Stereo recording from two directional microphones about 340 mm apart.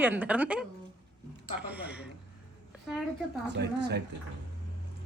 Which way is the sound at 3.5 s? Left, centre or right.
Right.